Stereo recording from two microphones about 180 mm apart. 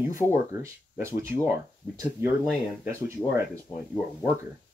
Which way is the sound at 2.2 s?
15° right (ahead or behind).